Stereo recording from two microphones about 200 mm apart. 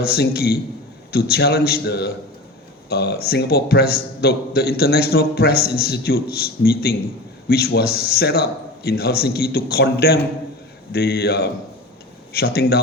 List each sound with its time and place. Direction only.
0.0 s a man's voice: 50° left (ahead or behind)